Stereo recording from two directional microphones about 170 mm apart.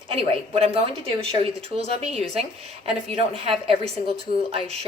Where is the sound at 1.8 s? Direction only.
35° right (ahead or behind).